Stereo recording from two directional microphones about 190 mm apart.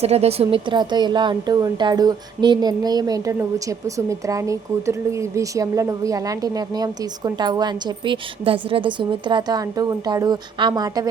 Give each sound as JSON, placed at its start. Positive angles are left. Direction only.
{"t": 0.0, "sound": "a woman's voice", "side_deg": -35}